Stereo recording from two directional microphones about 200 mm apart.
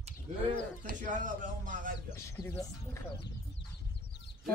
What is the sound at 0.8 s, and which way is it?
Speech, 40° right (ahead or behind).